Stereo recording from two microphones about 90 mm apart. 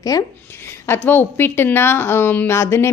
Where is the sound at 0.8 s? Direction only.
25° left (ahead or behind).